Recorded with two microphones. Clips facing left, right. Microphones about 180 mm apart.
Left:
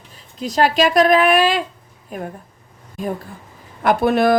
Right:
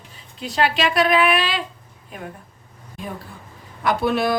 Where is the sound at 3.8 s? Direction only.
50° left (ahead or behind).